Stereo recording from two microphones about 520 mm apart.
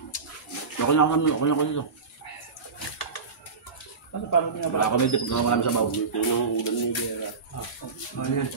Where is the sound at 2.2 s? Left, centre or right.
Left.